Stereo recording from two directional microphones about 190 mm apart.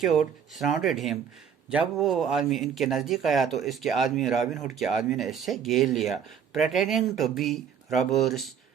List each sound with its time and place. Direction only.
0.0 s speech: centre (ahead or behind)